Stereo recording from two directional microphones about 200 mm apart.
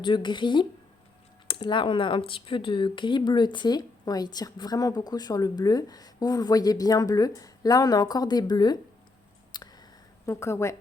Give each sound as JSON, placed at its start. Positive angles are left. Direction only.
{"t": 0.0, "sound": "speech", "side_deg": 25}
{"t": 9.5, "sound": "a sound", "side_deg": 20}
{"t": 10.2, "sound": "speech", "side_deg": 15}